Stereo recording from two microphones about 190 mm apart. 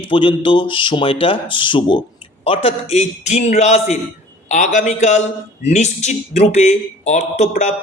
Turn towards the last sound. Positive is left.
turn(degrees=35)  # may be behind; listen again after turning